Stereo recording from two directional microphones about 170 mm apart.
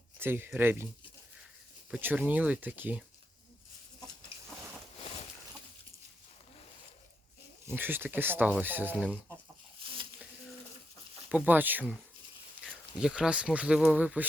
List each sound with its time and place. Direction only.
0.2 s speech: 10° right (ahead or behind)
1.9 s speech: 10° right (ahead or behind)
7.7 s speech: 10° right (ahead or behind)
11.3 s speech: 10° right (ahead or behind)